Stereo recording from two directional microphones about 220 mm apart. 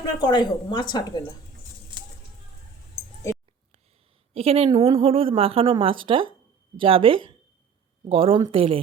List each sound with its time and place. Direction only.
0.2 s a woman's voice: 20° left (ahead or behind)
4.4 s a woman's voice: 25° right (ahead or behind)